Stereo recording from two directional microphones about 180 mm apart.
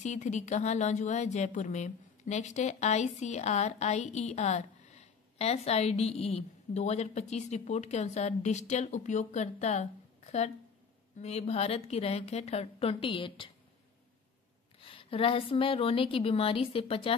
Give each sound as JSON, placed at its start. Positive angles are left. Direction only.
{"t": 0.0, "sound": "speech", "side_deg": 40}
{"t": 14.8, "sound": "speech", "side_deg": 30}